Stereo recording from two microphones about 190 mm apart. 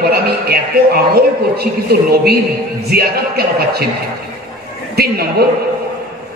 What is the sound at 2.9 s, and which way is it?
Speech, 55° right (ahead or behind).